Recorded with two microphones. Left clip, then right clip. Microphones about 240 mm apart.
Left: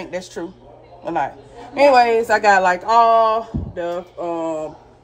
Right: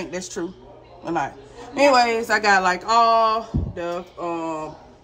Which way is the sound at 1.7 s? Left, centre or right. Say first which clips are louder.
Left 4 dB; centre.